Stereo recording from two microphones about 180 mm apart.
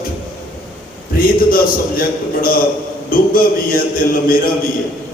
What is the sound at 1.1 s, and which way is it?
Speech, 55° left (ahead or behind).